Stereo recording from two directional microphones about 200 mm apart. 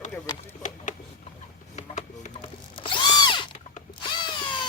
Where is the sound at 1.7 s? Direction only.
35° left (ahead or behind).